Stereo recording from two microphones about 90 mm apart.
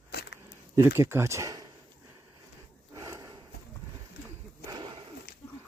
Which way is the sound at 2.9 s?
35° right (ahead or behind).